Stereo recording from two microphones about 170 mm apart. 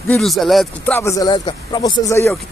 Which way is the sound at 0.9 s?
15° left (ahead or behind).